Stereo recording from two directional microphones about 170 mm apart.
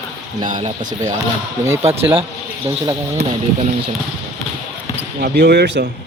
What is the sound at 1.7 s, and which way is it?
Speech, 40° right (ahead or behind).